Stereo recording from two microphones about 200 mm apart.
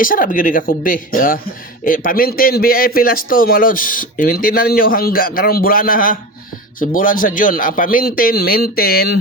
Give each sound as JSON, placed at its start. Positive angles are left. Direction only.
{"t": 0.0, "sound": "a man's voice", "side_deg": 45}